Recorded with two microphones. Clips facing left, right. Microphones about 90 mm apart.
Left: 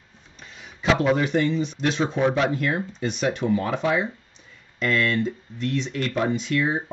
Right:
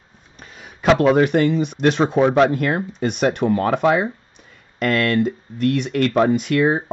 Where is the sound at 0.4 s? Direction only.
50° right (ahead or behind).